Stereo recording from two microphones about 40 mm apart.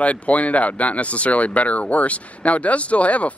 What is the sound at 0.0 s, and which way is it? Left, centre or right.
Speech, left.